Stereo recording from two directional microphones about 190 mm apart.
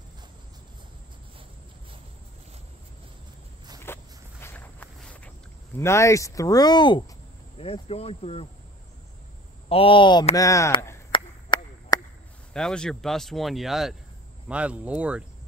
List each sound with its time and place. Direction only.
3.8 s walk: 10° left (ahead or behind)
5.8 s speech: 15° left (ahead or behind); by 8.5 s 30° left (ahead or behind)
9.7 s speech: 30° left (ahead or behind)
11.1 s a sound: 25° left (ahead or behind)
12.5 s speech: 5° left (ahead or behind)